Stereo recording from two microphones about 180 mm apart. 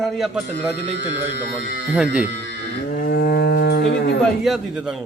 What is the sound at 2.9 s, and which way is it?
Moo, 55° left (ahead or behind).